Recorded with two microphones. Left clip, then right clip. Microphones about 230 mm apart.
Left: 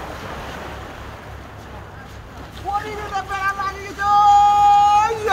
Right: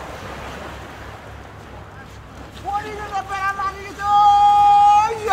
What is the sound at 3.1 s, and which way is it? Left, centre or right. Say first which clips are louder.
Yodeling: even; right.